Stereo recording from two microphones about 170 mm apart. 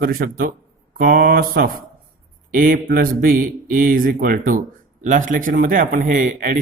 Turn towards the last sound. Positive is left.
turn(degrees=-50)  # may be behind; listen again after turning